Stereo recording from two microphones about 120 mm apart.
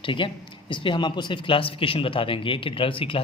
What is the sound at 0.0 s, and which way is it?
Speech, 45° left (ahead or behind).